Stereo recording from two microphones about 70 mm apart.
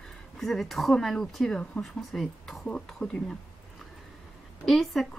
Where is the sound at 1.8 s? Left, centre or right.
Centre.